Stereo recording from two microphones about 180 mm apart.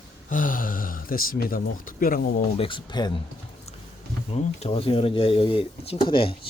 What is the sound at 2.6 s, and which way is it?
Speech, 30° left (ahead or behind).